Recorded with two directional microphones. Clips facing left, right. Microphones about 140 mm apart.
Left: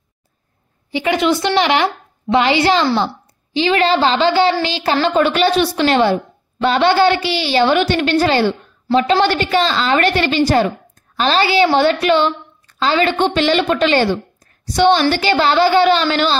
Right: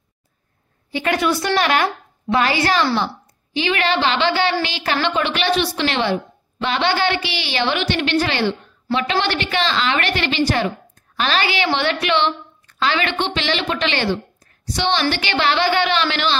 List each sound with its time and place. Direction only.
0.9 s a woman's voice: 20° left (ahead or behind); by 10.6 s 45° left (ahead or behind)
11.1 s a woman's voice: 30° left (ahead or behind)